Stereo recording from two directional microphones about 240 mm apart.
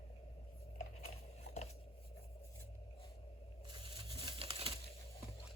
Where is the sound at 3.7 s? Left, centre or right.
Right.